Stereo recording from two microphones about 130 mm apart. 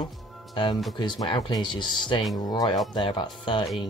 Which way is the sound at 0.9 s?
35° left (ahead or behind).